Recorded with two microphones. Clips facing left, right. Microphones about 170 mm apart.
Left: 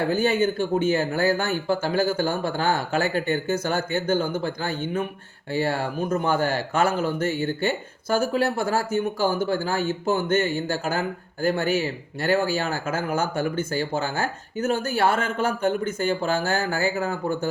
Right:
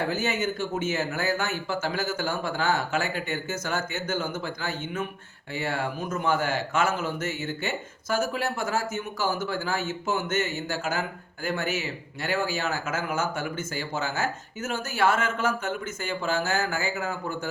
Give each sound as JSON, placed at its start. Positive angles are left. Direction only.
{"t": 0.1, "sound": "speech", "side_deg": 35}